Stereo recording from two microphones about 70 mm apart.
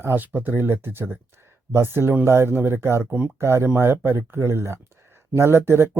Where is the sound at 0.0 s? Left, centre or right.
Right.